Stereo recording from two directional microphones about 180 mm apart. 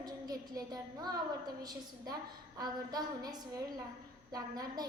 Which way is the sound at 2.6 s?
20° right (ahead or behind).